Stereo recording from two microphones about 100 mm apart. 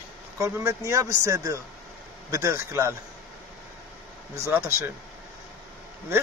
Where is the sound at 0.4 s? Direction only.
30° right (ahead or behind).